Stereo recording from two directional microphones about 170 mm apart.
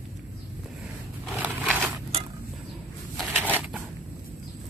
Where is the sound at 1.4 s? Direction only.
10° right (ahead or behind).